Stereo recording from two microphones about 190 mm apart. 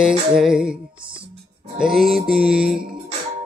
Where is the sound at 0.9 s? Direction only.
25° right (ahead or behind).